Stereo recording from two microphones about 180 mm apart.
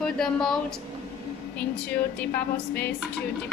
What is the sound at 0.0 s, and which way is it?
Speech, 5° left (ahead or behind).